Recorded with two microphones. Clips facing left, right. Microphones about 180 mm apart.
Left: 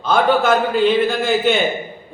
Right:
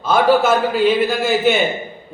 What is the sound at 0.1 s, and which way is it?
A man's voice, 5° right (ahead or behind).